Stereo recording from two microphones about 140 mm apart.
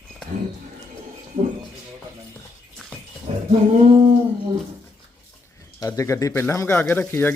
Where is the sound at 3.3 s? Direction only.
45° right (ahead or behind).